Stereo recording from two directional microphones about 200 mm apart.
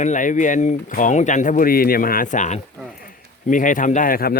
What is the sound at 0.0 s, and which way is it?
A man's voice, 40° left (ahead or behind).